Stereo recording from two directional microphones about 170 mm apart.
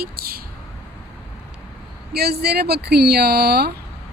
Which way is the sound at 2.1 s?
70° right (ahead or behind).